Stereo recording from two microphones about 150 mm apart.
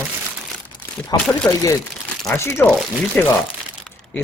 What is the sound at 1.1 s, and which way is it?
Speech, 25° left (ahead or behind).